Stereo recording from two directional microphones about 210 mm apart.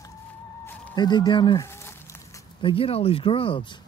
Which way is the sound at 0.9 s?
20° left (ahead or behind).